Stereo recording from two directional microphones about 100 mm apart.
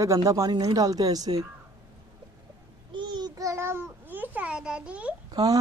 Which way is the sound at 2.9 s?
50° right (ahead or behind).